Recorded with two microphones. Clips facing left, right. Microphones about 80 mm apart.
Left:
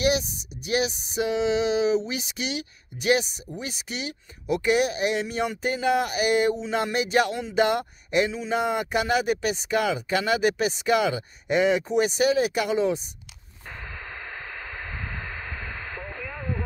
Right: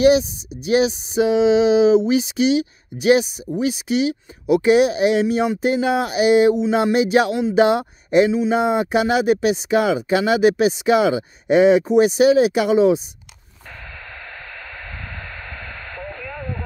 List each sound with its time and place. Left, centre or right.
0.7 s speech: right
8.3 s speech: centre
8.5 s speech: centre
16.0 s radio: centre